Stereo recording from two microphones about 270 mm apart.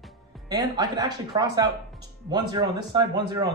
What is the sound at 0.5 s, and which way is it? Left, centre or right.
Speech, centre.